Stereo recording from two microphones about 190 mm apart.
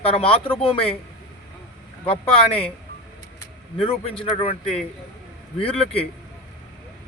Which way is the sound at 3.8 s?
30° left (ahead or behind).